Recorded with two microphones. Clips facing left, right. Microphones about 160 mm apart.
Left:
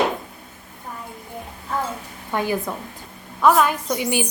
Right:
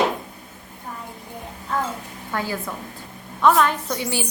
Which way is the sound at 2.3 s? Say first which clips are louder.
Left 4 dB; 20° left (ahead or behind).